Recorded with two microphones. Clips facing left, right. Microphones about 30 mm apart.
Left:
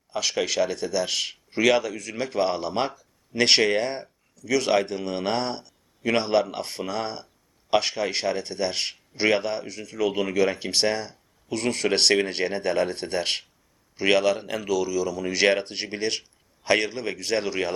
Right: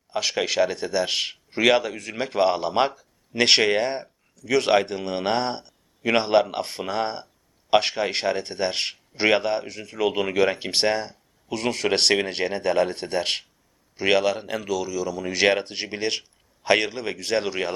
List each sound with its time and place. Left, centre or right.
0.1 s speech: centre
3.3 s a man's voice: centre
4.4 s speech: right
4.7 s a man's voice: centre
5.6 s a sound: right
6.4 s speech: right
11.5 s a man's voice: centre